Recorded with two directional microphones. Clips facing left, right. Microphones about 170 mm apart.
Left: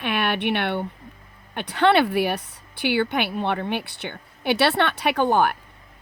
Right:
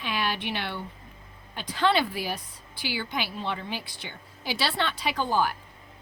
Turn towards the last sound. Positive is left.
turn(degrees=60)  # may be behind; listen again after turning